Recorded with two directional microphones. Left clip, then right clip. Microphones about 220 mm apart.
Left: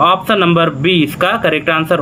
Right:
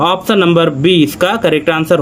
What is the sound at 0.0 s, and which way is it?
Speech, 55° right (ahead or behind).